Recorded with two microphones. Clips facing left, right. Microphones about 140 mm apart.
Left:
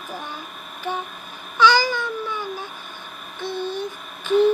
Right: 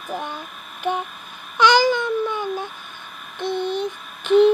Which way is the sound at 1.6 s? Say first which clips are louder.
Right 2 dB; 20° right (ahead or behind).